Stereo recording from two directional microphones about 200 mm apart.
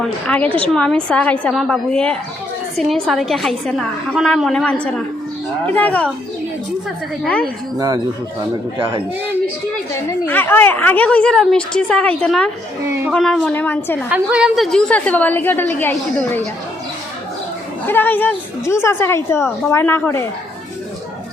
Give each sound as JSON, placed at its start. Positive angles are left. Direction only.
{"t": 0.0, "sound": "a woman's voice", "side_deg": 5}
{"t": 7.8, "sound": "speech", "side_deg": -20}
{"t": 9.9, "sound": "a woman's voice", "side_deg": 10}
{"t": 12.9, "sound": "a woman's voice", "side_deg": -10}
{"t": 13.1, "sound": "a woman's voice", "side_deg": 0}
{"t": 14.1, "sound": "a woman's voice", "side_deg": -5}
{"t": 17.8, "sound": "a woman's voice", "side_deg": 10}